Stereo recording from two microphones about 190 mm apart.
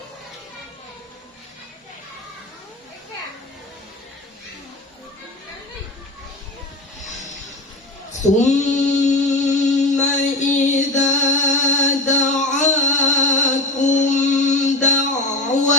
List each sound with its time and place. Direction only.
8.2 s female singing: 40° left (ahead or behind)
11.1 s music: 40° left (ahead or behind)